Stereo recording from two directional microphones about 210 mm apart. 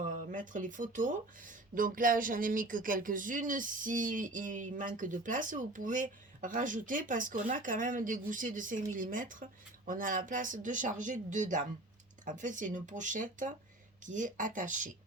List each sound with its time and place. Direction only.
0.0 s speech: 40° right (ahead or behind)